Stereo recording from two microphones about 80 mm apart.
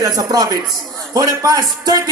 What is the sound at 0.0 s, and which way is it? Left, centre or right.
A man's voice, right.